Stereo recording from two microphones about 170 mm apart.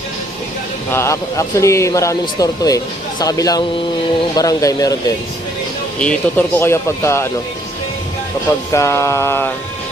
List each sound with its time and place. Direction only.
0.9 s speech: 15° left (ahead or behind)
5.9 s speech: 5° left (ahead or behind)
8.7 s speech: 15° left (ahead or behind)